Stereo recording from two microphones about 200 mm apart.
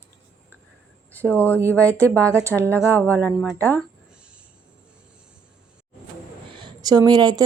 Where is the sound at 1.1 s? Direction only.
10° left (ahead or behind).